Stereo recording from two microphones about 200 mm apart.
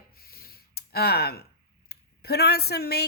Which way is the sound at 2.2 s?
55° left (ahead or behind).